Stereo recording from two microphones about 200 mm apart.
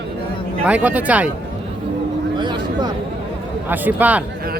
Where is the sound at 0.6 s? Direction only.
5° right (ahead or behind).